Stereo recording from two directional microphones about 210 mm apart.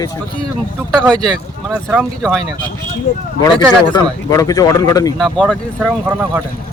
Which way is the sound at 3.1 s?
30° left (ahead or behind).